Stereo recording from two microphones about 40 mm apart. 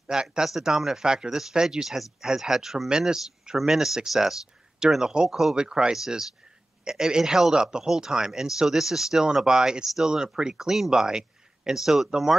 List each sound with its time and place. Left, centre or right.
0.0 s speech: centre
0.5 s speech: centre